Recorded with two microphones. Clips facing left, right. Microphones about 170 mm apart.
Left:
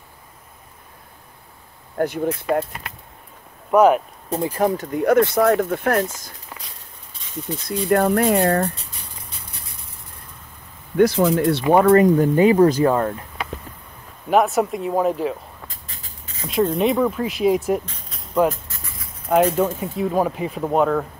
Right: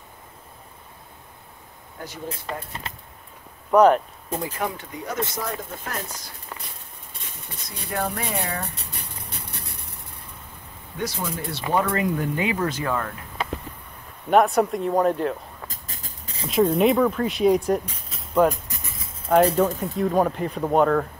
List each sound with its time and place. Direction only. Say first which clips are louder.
2.0 s speech: left 15 dB; 60° left (ahead or behind)
3.7 s speech: left 1 dB; 5° left (ahead or behind)
4.6 s speech: left 9 dB; 35° left (ahead or behind)
4.9 s speech: left 13 dB; 60° left (ahead or behind)
7.5 s speech: left 11 dB; 60° left (ahead or behind)
9.1 s a sound: right 3 dB; 65° right (ahead or behind)
11.0 s speech: left 14 dB; 60° left (ahead or behind); by 13.1 s 35° left (ahead or behind)
14.3 s speech: even; centre (ahead or behind)
15.7 s train: right 2 dB; 40° right (ahead or behind)
16.6 s speech: even; 5° right (ahead or behind)
17.8 s a sound: even; 5° right (ahead or behind)
18.5 s a sound: even; 15° right (ahead or behind)
19.2 s speech: left 1 dB; 5° left (ahead or behind)